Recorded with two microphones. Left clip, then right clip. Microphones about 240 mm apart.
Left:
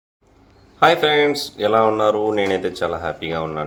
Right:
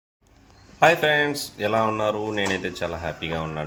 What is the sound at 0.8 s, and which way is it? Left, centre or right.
Speech, right.